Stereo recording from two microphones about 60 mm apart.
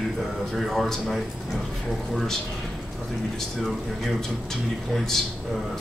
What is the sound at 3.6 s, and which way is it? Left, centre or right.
Speech, centre.